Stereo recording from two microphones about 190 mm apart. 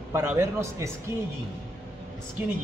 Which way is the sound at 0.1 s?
15° right (ahead or behind).